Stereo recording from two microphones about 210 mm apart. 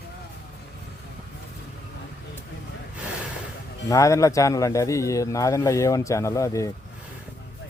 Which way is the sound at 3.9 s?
15° left (ahead or behind).